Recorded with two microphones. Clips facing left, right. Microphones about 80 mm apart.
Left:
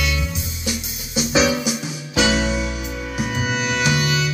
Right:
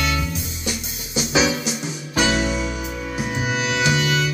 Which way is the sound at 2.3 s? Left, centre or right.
Centre.